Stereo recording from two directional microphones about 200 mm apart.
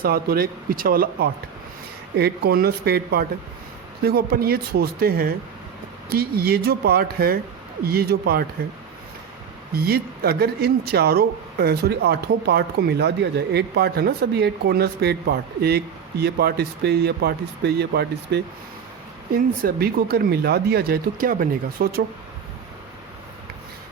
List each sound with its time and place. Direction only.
0.0 s speech: 50° right (ahead or behind)
9.7 s speech: 50° right (ahead or behind)